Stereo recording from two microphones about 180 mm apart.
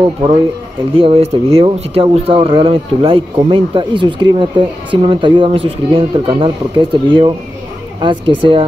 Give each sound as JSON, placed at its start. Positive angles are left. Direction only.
{"t": 0.9, "sound": "speech", "side_deg": -30}